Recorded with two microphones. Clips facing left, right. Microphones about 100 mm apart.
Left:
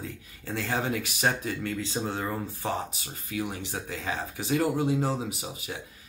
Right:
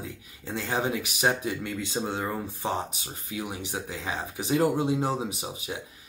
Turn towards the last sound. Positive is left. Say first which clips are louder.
# right 2 dB
turn(degrees=-20)  # may be behind; listen again after turning